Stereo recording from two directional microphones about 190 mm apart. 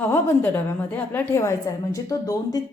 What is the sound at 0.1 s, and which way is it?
A woman's voice, 10° left (ahead or behind).